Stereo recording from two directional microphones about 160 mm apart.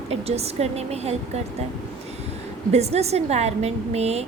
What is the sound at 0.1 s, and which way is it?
A woman's voice, 40° right (ahead or behind).